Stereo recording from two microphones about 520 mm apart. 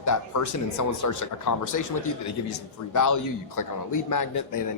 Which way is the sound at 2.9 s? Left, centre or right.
Left.